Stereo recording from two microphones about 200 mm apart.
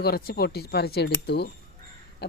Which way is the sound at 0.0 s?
50° left (ahead or behind).